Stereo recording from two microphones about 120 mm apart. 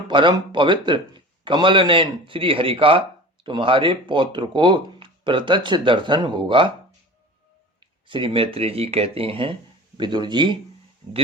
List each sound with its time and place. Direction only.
0.1 s speech: 40° right (ahead or behind)
8.0 s speech: 45° right (ahead or behind)